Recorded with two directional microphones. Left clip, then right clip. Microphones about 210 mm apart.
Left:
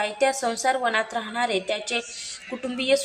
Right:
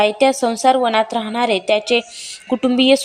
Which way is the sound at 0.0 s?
35° right (ahead or behind).